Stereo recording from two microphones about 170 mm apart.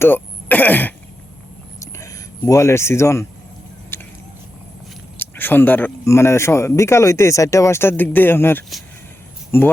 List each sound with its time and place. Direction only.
0.0 s speech: 10° left (ahead or behind)
1.8 s a sound: 20° left (ahead or behind)
5.1 s speech: 10° left (ahead or behind)